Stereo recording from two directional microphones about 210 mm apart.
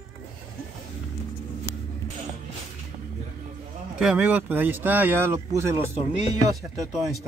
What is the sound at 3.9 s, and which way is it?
Speech, 5° right (ahead or behind).